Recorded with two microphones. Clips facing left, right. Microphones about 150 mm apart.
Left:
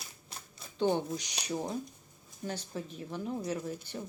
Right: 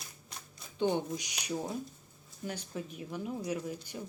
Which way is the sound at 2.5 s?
35° left (ahead or behind).